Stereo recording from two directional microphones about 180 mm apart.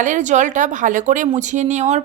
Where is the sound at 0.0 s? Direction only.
45° right (ahead or behind).